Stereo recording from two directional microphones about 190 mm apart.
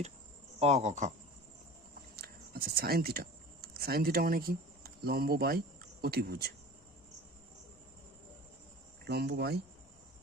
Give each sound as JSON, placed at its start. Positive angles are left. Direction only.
{"t": 0.6, "sound": "speech", "side_deg": -35}
{"t": 2.1, "sound": "speech", "side_deg": -55}
{"t": 9.0, "sound": "speech", "side_deg": -60}